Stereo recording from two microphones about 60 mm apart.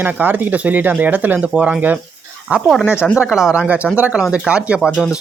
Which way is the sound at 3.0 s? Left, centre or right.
Centre.